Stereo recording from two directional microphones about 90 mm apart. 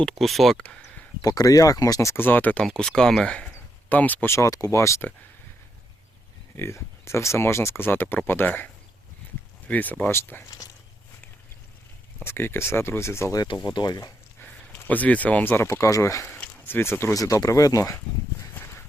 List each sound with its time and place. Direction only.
0.2 s speech: centre (ahead or behind)
0.6 s speech: 15° left (ahead or behind)
1.2 s speech: 40° left (ahead or behind)
2.2 s speech: 20° left (ahead or behind)
4.4 s speech: 40° left (ahead or behind)
6.6 s speech: 30° left (ahead or behind)
12.2 s speech: 25° left (ahead or behind)
13.5 s speech: 55° left (ahead or behind)
14.4 s speech: 20° left (ahead or behind)
15.6 s speech: 35° left (ahead or behind)
16.4 s a sound: 25° left (ahead or behind)
17.2 s speech: 40° left (ahead or behind)